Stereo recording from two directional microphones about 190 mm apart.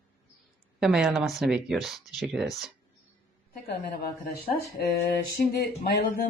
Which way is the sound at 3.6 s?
55° left (ahead or behind).